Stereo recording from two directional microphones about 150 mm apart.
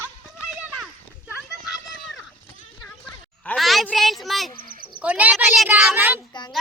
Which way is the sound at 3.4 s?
Centre (ahead or behind).